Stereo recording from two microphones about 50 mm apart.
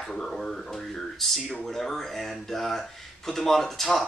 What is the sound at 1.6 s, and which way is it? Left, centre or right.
Speech, centre.